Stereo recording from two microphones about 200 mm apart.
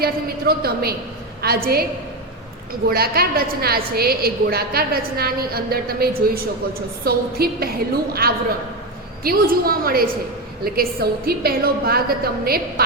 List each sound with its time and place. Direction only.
0.0 s a woman's voice: 50° right (ahead or behind)
2.9 s a woman's voice: 50° right (ahead or behind)